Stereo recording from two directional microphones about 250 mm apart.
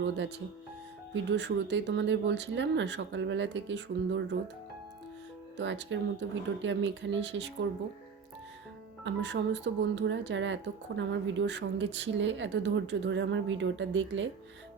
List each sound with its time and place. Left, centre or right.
1.1 s speech: right
5.5 s speech: right
9.0 s speech: right